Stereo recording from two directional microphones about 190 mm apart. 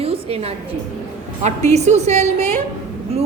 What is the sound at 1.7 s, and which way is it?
Speech, 35° right (ahead or behind).